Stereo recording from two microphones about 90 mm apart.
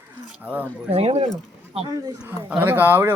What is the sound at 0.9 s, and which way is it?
Speech, 90° right.